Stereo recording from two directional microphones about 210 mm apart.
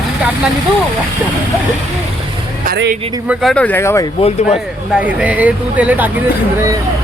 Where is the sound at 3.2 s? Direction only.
Centre (ahead or behind).